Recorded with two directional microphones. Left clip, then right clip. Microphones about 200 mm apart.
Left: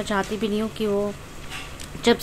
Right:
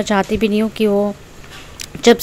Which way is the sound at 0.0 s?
35° right (ahead or behind).